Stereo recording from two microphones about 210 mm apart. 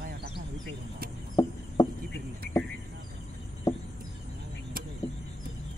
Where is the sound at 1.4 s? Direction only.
20° left (ahead or behind).